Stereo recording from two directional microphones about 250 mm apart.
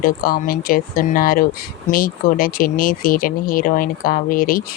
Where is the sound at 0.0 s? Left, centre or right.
Left.